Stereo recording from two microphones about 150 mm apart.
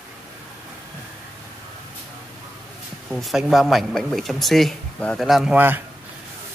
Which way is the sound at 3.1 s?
Centre (ahead or behind).